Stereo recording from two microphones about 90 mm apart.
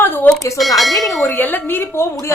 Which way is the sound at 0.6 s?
Centre (ahead or behind).